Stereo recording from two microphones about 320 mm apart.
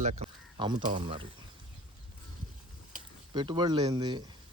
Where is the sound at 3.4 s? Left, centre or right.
Centre.